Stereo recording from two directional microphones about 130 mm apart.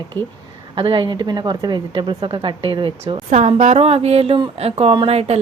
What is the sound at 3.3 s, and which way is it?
A woman's voice, 60° right (ahead or behind).